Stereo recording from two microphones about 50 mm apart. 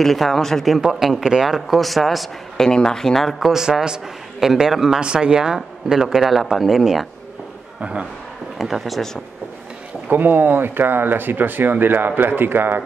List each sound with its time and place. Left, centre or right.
0.0 s speech: centre
0.7 s a man's voice: centre
2.5 s speech: centre
3.5 s a man's voice: centre
7.8 s a man's voice: right
8.5 s speech: centre
10.0 s speech: right